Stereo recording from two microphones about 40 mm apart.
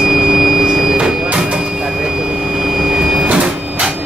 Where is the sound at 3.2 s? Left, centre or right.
Right.